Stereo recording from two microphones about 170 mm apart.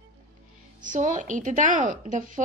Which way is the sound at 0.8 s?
50° right (ahead or behind).